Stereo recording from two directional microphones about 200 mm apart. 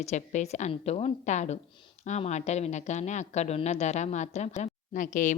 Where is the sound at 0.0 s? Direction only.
35° left (ahead or behind).